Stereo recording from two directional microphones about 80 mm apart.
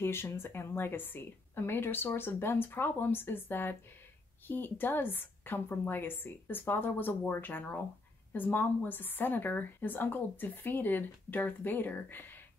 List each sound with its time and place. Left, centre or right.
0.0 s a woman's voice: left